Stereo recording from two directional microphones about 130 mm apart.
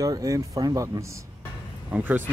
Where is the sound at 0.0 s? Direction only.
25° right (ahead or behind).